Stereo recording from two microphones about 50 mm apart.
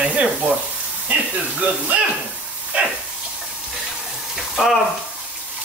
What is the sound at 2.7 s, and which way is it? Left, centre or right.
Dog, right.